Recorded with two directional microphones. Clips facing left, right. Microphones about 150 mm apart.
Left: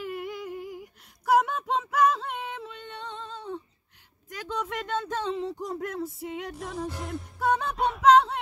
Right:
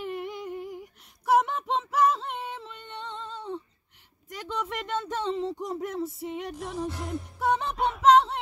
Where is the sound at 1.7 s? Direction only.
5° left (ahead or behind).